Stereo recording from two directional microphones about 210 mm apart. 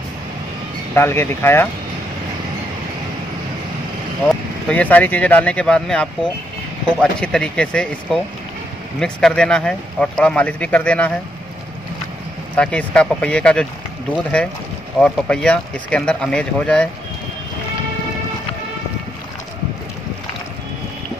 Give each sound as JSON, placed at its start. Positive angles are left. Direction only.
{"t": 0.9, "sound": "speech", "side_deg": 10}
{"t": 4.6, "sound": "speech", "side_deg": 5}
{"t": 12.5, "sound": "speech", "side_deg": 5}